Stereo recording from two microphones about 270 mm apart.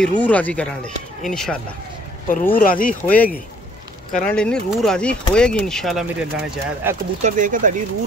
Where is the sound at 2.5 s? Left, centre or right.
Left.